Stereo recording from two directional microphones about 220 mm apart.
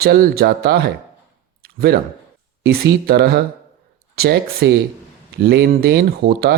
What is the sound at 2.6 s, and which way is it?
Speech, 45° right (ahead or behind).